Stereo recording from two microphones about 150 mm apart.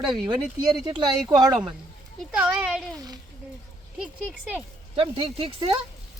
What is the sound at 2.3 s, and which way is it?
Speech, 5° right (ahead or behind).